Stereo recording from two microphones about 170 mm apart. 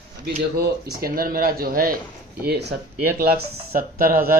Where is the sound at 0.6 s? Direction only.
60° right (ahead or behind).